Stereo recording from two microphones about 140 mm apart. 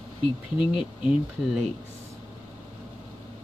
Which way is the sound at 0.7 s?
5° right (ahead or behind).